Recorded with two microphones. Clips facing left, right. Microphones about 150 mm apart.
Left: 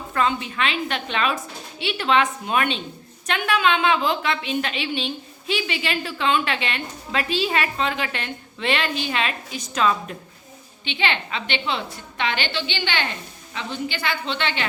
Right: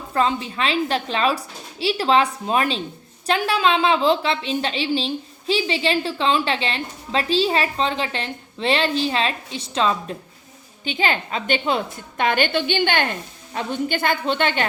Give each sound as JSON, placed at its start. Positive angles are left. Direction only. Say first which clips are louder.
{"t": 0.1, "sound": "a woman's voice", "louder": "right 2 dB", "side_deg": -30}
{"t": 10.8, "sound": "a woman's voice", "louder": "right 3 dB", "side_deg": -40}